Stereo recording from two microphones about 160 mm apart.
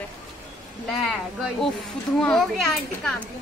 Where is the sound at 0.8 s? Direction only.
Centre (ahead or behind).